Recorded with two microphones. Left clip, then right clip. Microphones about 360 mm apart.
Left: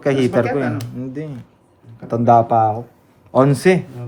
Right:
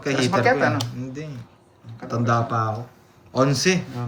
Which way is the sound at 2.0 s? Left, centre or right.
Centre.